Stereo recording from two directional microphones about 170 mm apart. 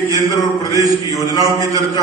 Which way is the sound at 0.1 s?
20° left (ahead or behind).